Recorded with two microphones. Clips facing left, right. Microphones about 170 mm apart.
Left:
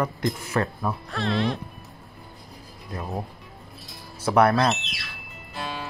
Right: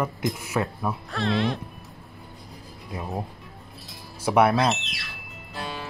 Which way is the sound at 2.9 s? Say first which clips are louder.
Even; centre (ahead or behind).